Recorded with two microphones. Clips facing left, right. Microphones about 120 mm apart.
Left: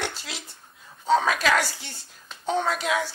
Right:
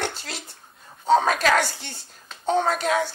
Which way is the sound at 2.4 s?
40° right (ahead or behind).